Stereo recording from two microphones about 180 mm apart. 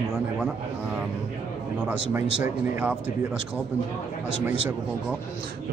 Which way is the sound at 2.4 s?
10° right (ahead or behind).